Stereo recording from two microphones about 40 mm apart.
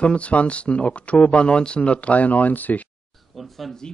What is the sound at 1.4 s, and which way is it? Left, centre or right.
Speech, left.